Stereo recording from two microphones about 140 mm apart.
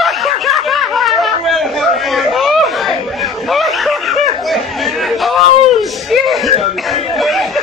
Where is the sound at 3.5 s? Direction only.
Centre (ahead or behind).